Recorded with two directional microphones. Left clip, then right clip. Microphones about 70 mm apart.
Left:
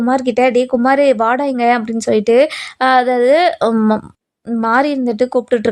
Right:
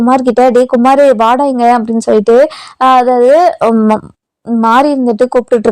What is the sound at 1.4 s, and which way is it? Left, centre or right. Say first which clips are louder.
Speech: right 5 dB; right.